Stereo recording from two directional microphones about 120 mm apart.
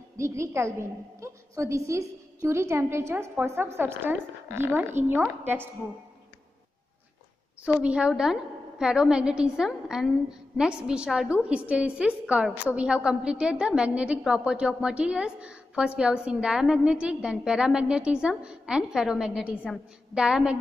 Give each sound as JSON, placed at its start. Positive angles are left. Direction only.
{"t": 0.2, "sound": "a woman's voice", "side_deg": -25}
{"t": 7.6, "sound": "a woman's voice", "side_deg": -10}